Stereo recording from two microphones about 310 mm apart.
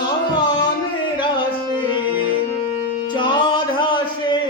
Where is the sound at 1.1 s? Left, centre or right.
Centre.